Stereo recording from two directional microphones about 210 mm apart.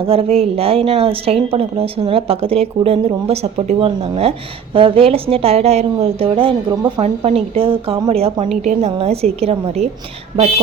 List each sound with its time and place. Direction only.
0.1 s a woman's voice: 30° right (ahead or behind)